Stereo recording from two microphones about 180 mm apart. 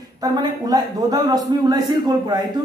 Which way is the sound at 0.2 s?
20° right (ahead or behind).